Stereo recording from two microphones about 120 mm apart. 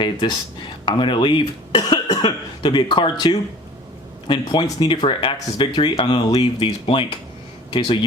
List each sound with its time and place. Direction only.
0.0 s speech: 40° left (ahead or behind)